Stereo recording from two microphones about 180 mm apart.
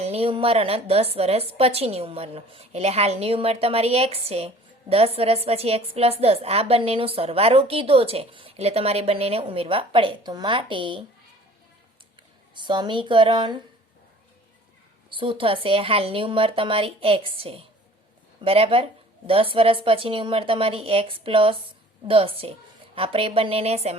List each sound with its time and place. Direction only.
0.0 s a woman's voice: 35° right (ahead or behind)
12.5 s a woman's voice: 25° right (ahead or behind)
15.1 s a woman's voice: 30° right (ahead or behind)